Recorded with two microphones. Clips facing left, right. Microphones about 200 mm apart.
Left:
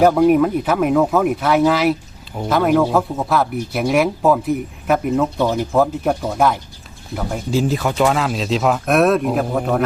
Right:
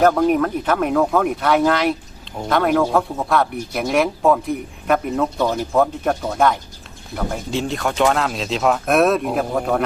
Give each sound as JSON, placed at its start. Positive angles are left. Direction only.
{"t": 0.0, "sound": "speech", "side_deg": 10}